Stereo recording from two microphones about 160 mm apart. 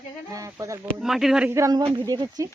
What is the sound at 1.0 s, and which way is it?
Speech, centre (ahead or behind).